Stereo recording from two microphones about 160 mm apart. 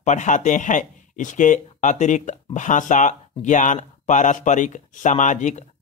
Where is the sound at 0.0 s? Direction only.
50° left (ahead or behind).